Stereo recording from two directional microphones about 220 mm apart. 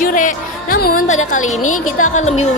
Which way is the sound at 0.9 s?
65° left (ahead or behind).